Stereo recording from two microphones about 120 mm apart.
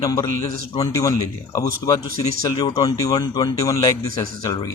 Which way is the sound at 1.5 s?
30° left (ahead or behind).